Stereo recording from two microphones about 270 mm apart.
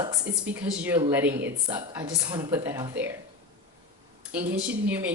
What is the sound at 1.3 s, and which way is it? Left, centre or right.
Speech, right.